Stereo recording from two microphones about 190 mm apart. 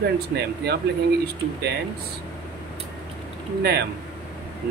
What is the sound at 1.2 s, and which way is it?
Speech, 60° right (ahead or behind).